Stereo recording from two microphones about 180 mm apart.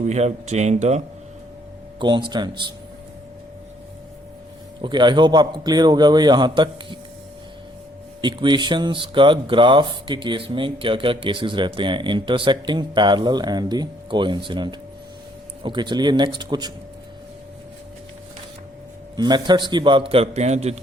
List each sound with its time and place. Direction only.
0.0 s speech: 40° right (ahead or behind)
2.0 s speech: 25° right (ahead or behind)
4.8 s speech: 25° right (ahead or behind)
8.2 s speech: 25° right (ahead or behind)
19.1 s speech: 25° right (ahead or behind)